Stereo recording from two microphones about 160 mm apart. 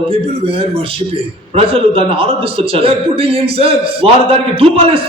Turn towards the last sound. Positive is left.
turn(degrees=-35)  # may be behind; listen again after turning